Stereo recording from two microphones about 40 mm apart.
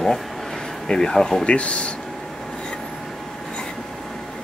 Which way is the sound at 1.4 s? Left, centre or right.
Left.